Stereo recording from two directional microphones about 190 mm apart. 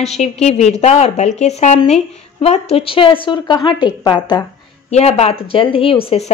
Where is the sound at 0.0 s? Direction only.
35° left (ahead or behind).